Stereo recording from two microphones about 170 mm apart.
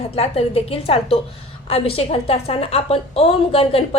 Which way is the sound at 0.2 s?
35° left (ahead or behind).